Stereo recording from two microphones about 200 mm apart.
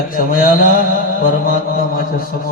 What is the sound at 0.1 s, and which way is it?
Mantra, 45° left (ahead or behind).